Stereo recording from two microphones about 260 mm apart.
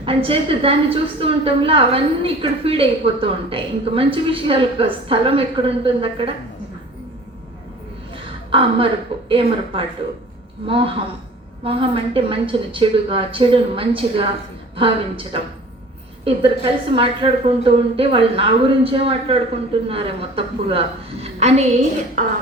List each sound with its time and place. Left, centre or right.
0.0 s a woman's voice: right
8.1 s a sound: right
9.1 s a woman's voice: centre
10.7 s a woman's voice: right